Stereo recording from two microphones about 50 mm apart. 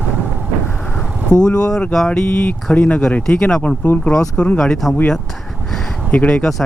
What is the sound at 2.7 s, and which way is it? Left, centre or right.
Speech, left.